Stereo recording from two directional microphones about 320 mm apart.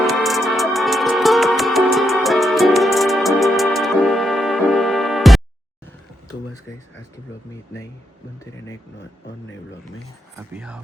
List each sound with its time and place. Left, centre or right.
0.0 s music: centre
10.5 s speech: centre